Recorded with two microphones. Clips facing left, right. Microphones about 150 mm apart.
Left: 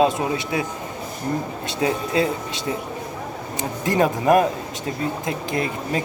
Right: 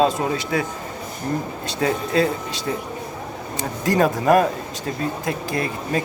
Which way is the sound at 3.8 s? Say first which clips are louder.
Right 1 dB; 20° left (ahead or behind).